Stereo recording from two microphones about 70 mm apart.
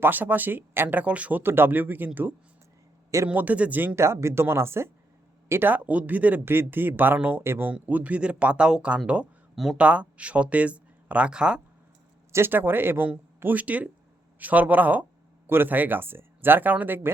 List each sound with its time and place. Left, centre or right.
0.0 s speech: right
1.4 s speech: right
3.3 s speech: right
4.0 s speech: right
7.4 s speech: right
7.7 s speech: right
12.3 s speech: right